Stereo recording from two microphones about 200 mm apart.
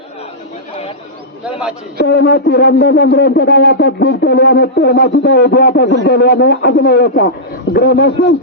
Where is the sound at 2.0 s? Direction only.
55° left (ahead or behind).